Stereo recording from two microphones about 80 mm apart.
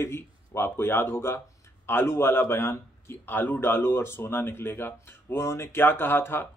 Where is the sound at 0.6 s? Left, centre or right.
Left.